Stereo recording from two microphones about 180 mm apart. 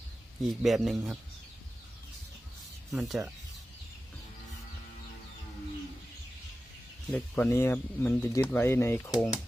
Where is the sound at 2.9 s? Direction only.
Centre (ahead or behind).